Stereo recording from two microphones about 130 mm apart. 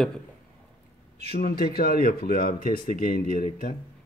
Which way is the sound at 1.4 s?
90° left.